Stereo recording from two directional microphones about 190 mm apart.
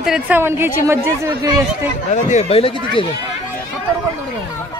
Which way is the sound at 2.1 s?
40° left (ahead or behind).